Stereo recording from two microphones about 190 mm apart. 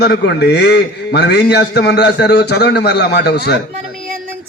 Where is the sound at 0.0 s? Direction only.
60° left (ahead or behind).